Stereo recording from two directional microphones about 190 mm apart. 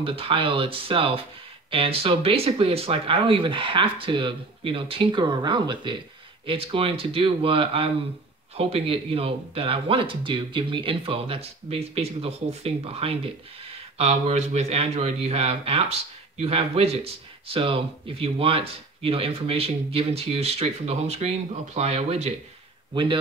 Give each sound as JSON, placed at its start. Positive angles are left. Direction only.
{"t": 0.0, "sound": "speech", "side_deg": -30}